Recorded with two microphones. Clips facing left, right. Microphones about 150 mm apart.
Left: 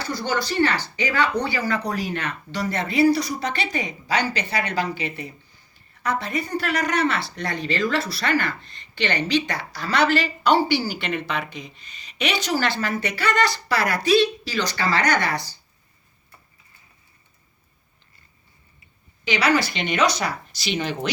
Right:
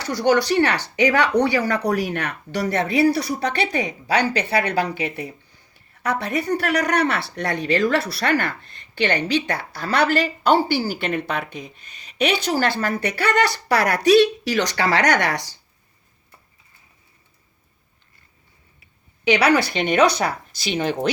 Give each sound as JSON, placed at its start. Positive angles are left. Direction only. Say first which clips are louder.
{"t": 0.0, "sound": "speech", "louder": "right 7 dB", "side_deg": -70}
{"t": 19.2, "sound": "speech", "louder": "right 4 dB", "side_deg": -65}